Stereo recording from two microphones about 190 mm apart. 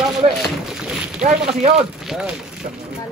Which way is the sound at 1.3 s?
35° right (ahead or behind).